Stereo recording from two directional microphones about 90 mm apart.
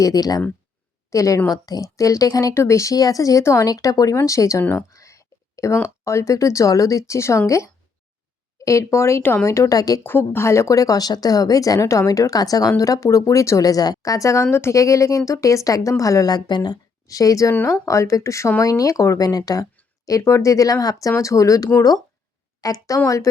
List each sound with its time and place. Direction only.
0.0 s speech: 45° left (ahead or behind)
4.9 s a sound: 35° left (ahead or behind)
6.1 s speech: 35° left (ahead or behind)
10.0 s speech: 25° left (ahead or behind); by 16.7 s 55° left (ahead or behind)
17.1 s speech: 40° left (ahead or behind)